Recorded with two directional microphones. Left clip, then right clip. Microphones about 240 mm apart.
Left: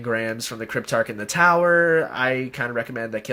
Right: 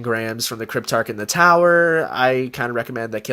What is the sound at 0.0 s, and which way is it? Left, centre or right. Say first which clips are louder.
Speech: right 2 dB; right.